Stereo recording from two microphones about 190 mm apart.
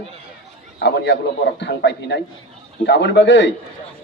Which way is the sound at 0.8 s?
65° left (ahead or behind).